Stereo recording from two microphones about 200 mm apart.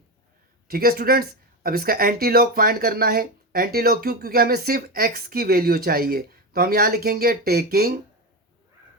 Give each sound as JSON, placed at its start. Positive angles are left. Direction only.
{"t": 0.7, "sound": "speech", "side_deg": -50}